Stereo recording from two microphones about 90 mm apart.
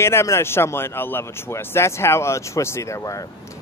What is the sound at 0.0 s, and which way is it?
A man's voice, 30° left (ahead or behind).